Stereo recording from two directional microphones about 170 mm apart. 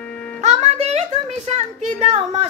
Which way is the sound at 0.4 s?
40° right (ahead or behind).